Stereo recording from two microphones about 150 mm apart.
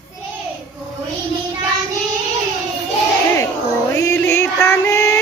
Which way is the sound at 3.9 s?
15° left (ahead or behind).